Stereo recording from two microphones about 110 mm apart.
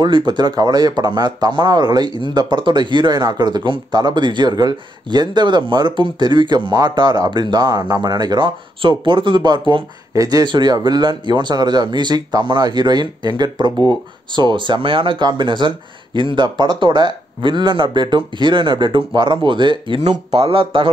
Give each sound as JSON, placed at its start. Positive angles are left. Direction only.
{"t": 0.0, "sound": "speech", "side_deg": -45}
{"t": 10.1, "sound": "speech", "side_deg": -35}
{"t": 20.0, "sound": "speech", "side_deg": -75}